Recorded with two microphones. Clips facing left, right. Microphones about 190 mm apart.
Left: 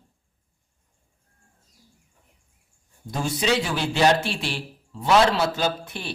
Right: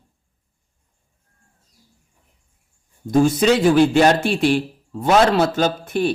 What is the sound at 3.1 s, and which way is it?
A man's voice, 50° right (ahead or behind).